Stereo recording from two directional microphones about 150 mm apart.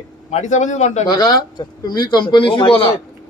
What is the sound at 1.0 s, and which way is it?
A man's voice, 25° left (ahead or behind).